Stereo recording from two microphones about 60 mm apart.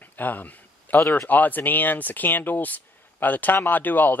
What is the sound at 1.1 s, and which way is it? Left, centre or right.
Speech, left.